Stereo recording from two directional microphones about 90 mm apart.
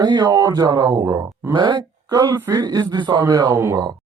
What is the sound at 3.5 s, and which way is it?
Speech, 30° right (ahead or behind).